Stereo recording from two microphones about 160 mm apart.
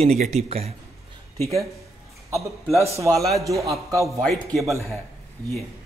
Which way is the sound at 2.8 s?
20° right (ahead or behind).